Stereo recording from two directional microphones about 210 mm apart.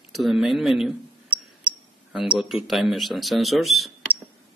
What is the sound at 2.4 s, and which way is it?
Speech, centre (ahead or behind).